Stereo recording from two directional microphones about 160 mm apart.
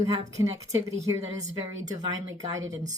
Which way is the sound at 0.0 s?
20° right (ahead or behind).